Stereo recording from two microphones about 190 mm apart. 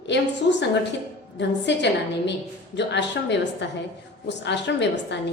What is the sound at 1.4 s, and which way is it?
A woman's voice, 65° left (ahead or behind).